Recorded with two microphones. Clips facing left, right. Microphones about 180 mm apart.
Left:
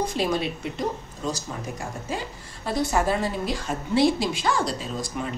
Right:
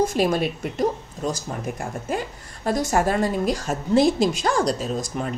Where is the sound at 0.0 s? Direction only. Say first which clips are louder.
Right 4 dB; 50° right (ahead or behind).